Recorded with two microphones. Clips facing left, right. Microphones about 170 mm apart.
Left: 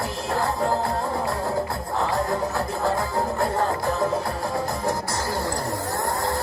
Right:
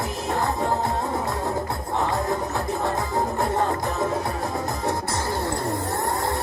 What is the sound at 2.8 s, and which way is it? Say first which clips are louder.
Music: left 2 dB; 20° right (ahead or behind).